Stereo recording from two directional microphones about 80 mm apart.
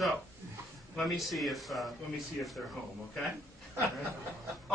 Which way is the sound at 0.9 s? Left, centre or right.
Centre.